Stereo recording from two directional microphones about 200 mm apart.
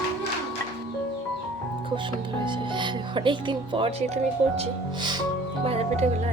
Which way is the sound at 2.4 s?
25° right (ahead or behind).